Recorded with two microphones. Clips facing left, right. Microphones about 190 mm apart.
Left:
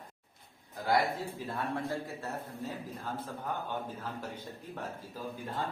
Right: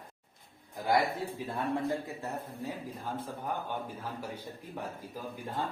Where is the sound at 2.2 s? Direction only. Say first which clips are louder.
Right 1 dB; 15° right (ahead or behind).